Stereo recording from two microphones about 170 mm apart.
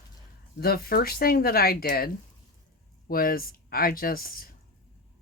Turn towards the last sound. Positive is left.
turn(degrees=60)  # may be behind; listen again after turning